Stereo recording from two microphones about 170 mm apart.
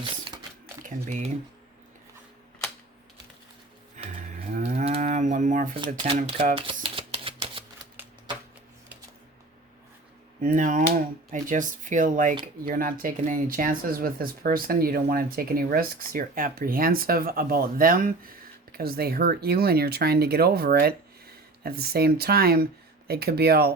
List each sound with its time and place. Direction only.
0.8 s typing: 50° right (ahead or behind)
4.4 s moo: 45° right (ahead or behind)
5.8 s speech: 30° right (ahead or behind)
6.3 s shuffling cards: 30° right (ahead or behind)
10.4 s speech: 50° right (ahead or behind); by 23.7 s 65° right (ahead or behind)